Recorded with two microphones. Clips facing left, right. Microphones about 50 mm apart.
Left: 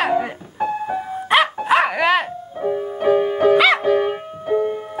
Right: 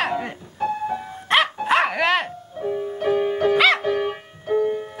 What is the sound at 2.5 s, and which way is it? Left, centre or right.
Music, centre.